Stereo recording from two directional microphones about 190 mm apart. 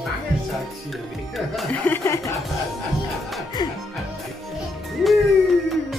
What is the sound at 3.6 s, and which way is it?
Music, 20° left (ahead or behind).